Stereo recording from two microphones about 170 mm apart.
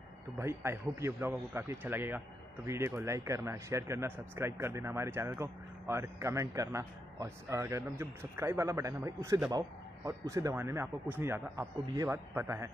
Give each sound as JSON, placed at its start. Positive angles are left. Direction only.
{"t": 0.4, "sound": "a man's voice", "side_deg": -15}